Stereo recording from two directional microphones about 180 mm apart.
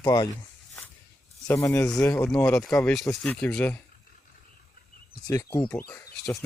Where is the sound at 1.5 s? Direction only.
15° left (ahead or behind).